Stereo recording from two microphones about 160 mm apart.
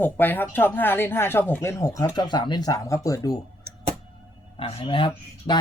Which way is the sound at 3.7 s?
75° right (ahead or behind).